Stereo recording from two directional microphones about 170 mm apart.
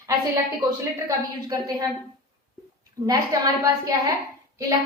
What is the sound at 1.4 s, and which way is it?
Speech, 20° right (ahead or behind).